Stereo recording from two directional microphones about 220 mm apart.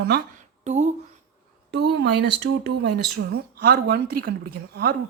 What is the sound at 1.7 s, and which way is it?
Speech, 50° right (ahead or behind).